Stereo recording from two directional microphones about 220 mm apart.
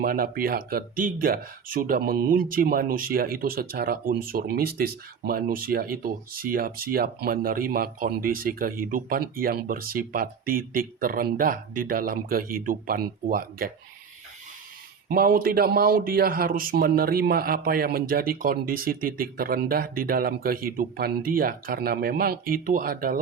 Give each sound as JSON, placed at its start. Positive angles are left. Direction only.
{"t": 0.0, "sound": "speech", "side_deg": -40}
{"t": 15.1, "sound": "speech", "side_deg": -40}